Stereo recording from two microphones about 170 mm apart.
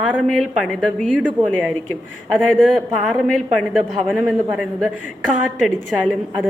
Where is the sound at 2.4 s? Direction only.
5° left (ahead or behind).